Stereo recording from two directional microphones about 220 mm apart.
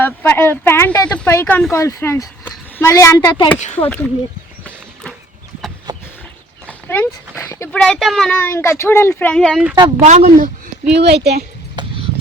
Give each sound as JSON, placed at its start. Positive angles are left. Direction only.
{"t": 0.0, "sound": "speech", "side_deg": 10}
{"t": 3.8, "sound": "speech", "side_deg": 10}
{"t": 5.9, "sound": "a sound", "side_deg": -20}
{"t": 6.7, "sound": "speech", "side_deg": 10}
{"t": 10.0, "sound": "a woman's voice", "side_deg": -35}